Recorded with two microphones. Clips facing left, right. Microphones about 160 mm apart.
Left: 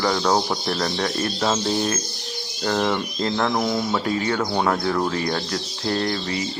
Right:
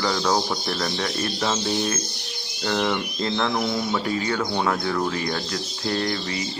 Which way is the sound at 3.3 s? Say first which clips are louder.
Left 2 dB; 15° left (ahead or behind).